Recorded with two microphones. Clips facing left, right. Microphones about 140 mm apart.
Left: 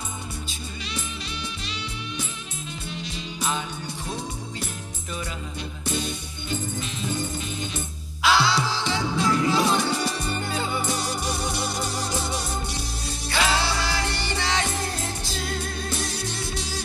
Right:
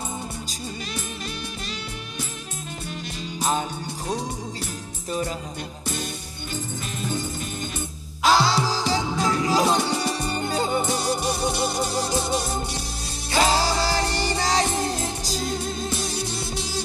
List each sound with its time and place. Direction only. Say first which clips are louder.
8.2 s music: right 2 dB; 40° right (ahead or behind); by 12.6 s 20° right (ahead or behind)
13.4 s music: right 4 dB; 40° right (ahead or behind)